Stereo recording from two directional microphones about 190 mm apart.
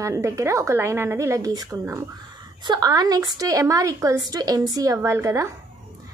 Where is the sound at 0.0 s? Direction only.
15° right (ahead or behind).